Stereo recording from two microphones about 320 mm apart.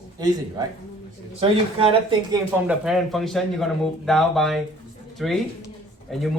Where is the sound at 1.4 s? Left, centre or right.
Centre.